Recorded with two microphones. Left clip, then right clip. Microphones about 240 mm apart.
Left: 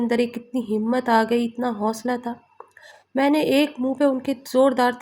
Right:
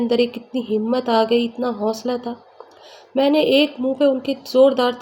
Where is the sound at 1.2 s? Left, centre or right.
Left.